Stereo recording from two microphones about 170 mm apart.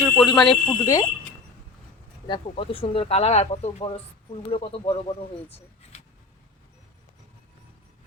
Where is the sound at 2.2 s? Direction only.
30° left (ahead or behind).